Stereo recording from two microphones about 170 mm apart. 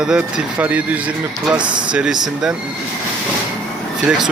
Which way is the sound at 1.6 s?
25° right (ahead or behind).